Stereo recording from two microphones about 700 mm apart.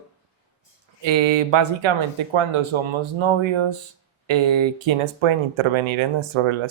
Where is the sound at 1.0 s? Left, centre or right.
Right.